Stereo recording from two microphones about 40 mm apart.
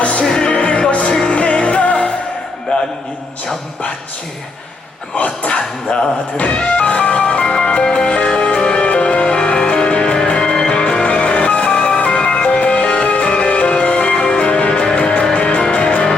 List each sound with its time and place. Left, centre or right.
0.0 s music: left
0.3 s music: left
5.1 s music: left
7.4 s music: centre
11.0 s music: left